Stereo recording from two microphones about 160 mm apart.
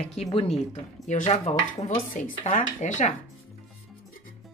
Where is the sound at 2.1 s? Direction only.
50° left (ahead or behind).